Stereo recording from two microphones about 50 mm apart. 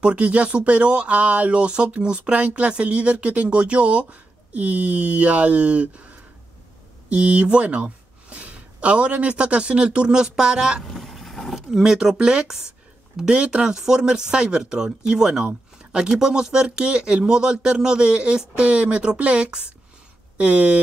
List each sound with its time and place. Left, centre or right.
0.0 s a man's voice: right
10.9 s vehicle: centre
11.7 s speech: centre
15.4 s a sound: right
16.1 s speech: centre